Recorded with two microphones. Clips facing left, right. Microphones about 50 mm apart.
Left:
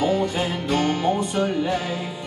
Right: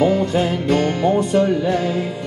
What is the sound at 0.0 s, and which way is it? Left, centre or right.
Music, right.